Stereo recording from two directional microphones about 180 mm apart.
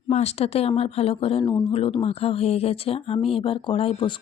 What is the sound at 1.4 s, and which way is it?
Speech, 15° left (ahead or behind).